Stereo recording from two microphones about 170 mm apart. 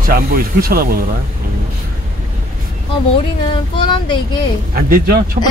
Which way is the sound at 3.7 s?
30° left (ahead or behind).